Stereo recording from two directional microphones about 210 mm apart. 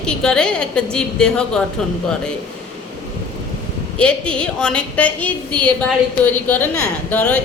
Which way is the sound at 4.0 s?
5° left (ahead or behind).